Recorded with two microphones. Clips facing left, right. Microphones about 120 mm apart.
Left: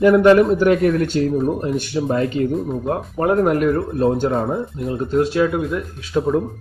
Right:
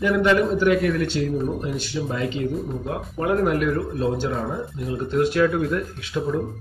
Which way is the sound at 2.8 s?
40° left (ahead or behind).